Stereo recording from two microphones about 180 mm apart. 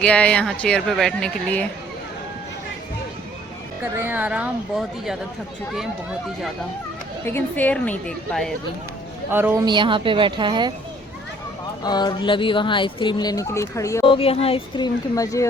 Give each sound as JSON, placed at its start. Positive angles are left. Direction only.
{"t": 0.0, "sound": "speech", "side_deg": 5}
{"t": 3.9, "sound": "a woman's voice", "side_deg": -10}
{"t": 7.3, "sound": "speech", "side_deg": 10}
{"t": 9.3, "sound": "a woman's voice", "side_deg": -10}
{"t": 9.6, "sound": "a woman's voice", "side_deg": -25}
{"t": 11.8, "sound": "speech", "side_deg": 25}
{"t": 14.0, "sound": "speech", "side_deg": 30}
{"t": 15.1, "sound": "speech", "side_deg": 20}